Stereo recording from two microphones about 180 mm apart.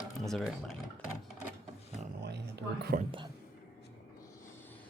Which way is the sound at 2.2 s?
65° right (ahead or behind).